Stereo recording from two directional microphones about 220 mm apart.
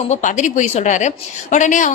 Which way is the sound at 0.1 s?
35° left (ahead or behind).